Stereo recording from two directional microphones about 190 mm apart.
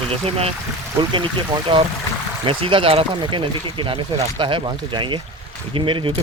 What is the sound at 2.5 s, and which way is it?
Speech, 25° right (ahead or behind).